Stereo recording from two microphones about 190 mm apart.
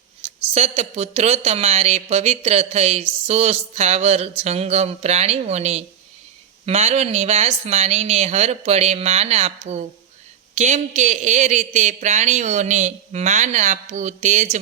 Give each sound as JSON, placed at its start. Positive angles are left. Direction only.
{"t": 0.3, "sound": "speech", "side_deg": -35}